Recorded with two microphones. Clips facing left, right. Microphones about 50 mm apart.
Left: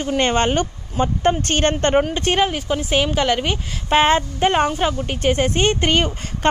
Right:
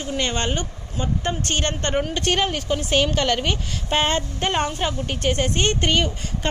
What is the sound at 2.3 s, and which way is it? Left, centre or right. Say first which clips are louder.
Speech: left 3 dB; centre.